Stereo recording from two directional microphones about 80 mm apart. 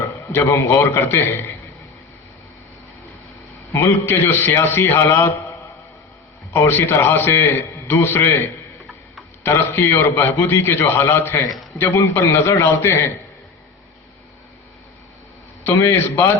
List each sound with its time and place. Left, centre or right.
0.3 s a man's voice: left
3.7 s a man's voice: left
15.6 s a man's voice: left